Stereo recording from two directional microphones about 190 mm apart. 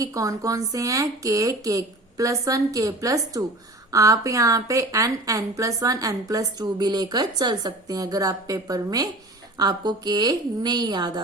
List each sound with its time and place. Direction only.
0.0 s a woman's voice: 15° right (ahead or behind)